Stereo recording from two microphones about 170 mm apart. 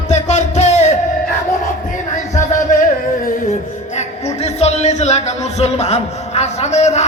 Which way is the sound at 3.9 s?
40° left (ahead or behind).